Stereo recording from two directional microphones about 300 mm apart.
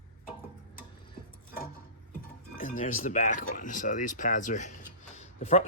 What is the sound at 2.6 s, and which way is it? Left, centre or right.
Speech, left.